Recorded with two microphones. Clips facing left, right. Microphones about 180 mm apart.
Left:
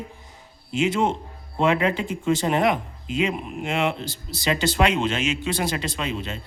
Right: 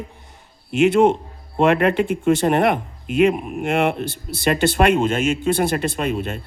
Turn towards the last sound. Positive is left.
turn(degrees=-55)  # may be behind; listen again after turning